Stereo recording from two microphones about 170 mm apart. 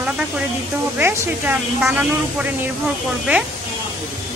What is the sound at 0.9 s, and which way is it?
A woman's voice, 10° right (ahead or behind).